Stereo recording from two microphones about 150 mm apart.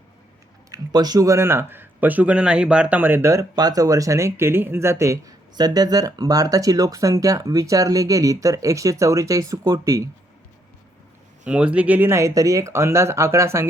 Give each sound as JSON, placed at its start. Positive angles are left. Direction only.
{"t": 0.7, "sound": "speech", "side_deg": -25}
{"t": 11.4, "sound": "speech", "side_deg": -10}